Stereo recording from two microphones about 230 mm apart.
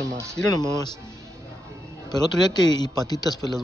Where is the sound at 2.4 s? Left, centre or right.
Centre.